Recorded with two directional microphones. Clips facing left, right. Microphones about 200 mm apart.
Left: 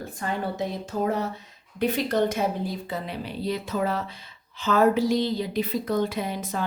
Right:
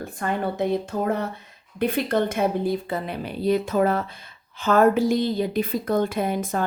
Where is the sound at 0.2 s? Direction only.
55° right (ahead or behind).